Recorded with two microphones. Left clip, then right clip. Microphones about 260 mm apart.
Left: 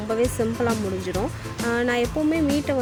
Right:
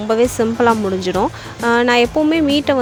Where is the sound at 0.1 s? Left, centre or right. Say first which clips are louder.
Right 8 dB; right.